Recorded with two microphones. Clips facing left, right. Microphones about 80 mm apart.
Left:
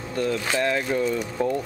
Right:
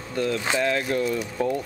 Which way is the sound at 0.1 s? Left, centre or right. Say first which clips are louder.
Even; centre.